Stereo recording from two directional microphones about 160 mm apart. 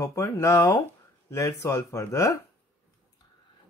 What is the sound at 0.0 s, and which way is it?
Speech, 20° left (ahead or behind).